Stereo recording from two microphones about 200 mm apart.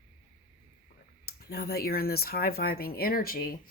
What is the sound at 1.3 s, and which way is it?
Speech, 50° left (ahead or behind).